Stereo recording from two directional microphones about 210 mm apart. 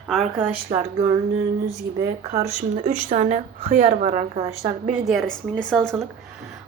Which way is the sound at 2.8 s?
35° right (ahead or behind).